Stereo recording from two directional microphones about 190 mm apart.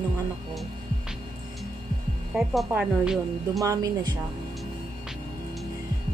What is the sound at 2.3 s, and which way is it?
A woman's voice, 5° right (ahead or behind).